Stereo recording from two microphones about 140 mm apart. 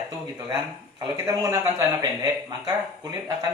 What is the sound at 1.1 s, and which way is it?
Speech, 20° right (ahead or behind).